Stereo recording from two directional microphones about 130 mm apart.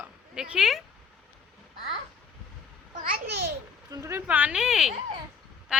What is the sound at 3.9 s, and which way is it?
Speech, 25° right (ahead or behind).